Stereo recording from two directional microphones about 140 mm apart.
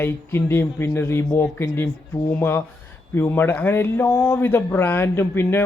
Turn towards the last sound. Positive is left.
turn(degrees=15)  # may be behind; listen again after turning